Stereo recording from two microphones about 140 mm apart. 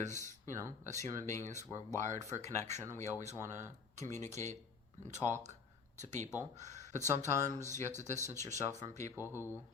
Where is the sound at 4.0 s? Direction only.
55° right (ahead or behind).